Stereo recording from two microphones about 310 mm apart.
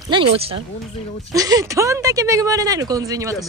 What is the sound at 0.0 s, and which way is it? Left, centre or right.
Speech, centre.